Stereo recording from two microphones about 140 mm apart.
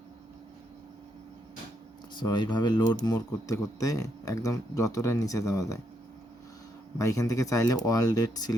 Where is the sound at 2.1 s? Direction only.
35° left (ahead or behind).